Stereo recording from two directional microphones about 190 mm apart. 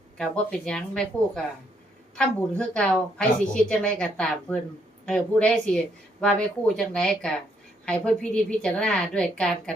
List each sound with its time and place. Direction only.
0.2 s a woman's voice: 5° left (ahead or behind)